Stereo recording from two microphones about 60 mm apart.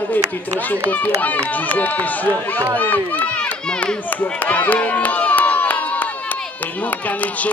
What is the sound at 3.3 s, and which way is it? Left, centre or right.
Run, centre.